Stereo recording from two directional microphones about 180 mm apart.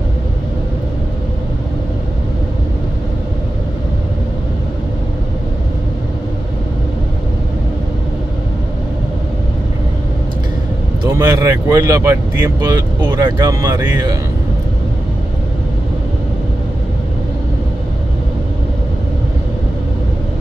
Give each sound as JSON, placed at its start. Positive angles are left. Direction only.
{"t": 11.1, "sound": "speech", "side_deg": -20}